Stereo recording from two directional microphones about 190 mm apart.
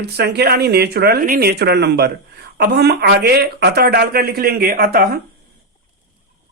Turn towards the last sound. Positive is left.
turn(degrees=-50)  # may be behind; listen again after turning